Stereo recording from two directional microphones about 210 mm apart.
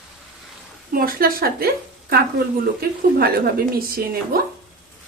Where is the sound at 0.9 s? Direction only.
45° right (ahead or behind).